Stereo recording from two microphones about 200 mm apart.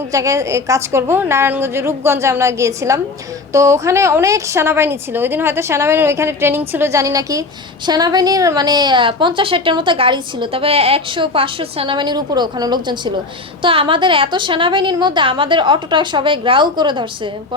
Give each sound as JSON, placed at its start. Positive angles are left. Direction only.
{"t": 0.1, "sound": "a woman's voice", "side_deg": -15}